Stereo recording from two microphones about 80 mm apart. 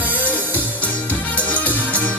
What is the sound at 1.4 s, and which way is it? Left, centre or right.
Music, centre.